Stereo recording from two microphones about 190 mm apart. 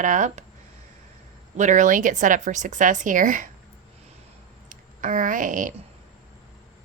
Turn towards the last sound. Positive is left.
turn(degrees=-45)  # may be behind; listen again after turning